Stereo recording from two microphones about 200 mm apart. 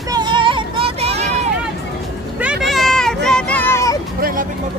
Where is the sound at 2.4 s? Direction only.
Centre (ahead or behind).